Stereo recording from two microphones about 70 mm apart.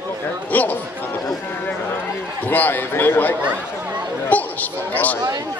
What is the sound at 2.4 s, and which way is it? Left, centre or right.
Speech, left.